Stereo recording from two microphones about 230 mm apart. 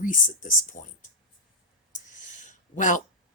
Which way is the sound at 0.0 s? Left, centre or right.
Left.